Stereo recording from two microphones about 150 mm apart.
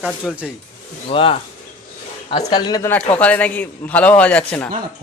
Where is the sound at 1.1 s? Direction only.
35° left (ahead or behind).